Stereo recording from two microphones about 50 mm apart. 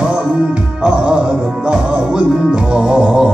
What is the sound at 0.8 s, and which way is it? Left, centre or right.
Music, centre.